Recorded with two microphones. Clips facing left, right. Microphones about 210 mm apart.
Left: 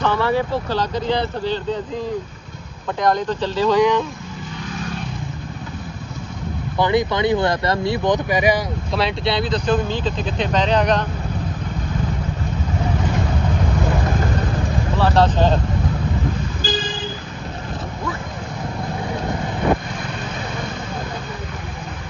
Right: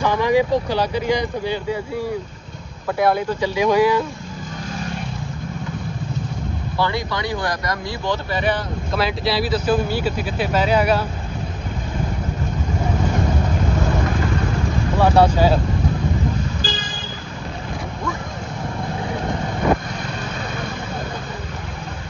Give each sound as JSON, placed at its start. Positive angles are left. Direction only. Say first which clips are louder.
{"t": 0.0, "sound": "speech", "louder": "right 2 dB", "side_deg": -15}
{"t": 3.0, "sound": "speech", "louder": "right 1 dB", "side_deg": -10}
{"t": 6.8, "sound": "speech", "louder": "left 6 dB", "side_deg": 20}
{"t": 8.9, "sound": "speech", "louder": "even", "side_deg": 0}
{"t": 15.0, "sound": "speech", "louder": "right 2 dB", "side_deg": -10}